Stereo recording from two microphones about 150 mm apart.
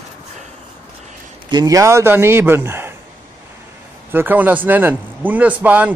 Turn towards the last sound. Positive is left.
turn(degrees=-10)  # may be behind; listen again after turning